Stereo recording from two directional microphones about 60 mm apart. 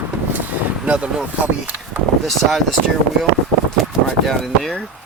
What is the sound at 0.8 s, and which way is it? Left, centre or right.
Speech, centre.